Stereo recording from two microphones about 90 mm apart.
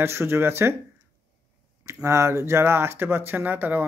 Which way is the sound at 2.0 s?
30° right (ahead or behind).